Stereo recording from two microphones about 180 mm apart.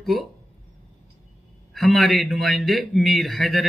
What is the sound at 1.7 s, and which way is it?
Speech, centre (ahead or behind).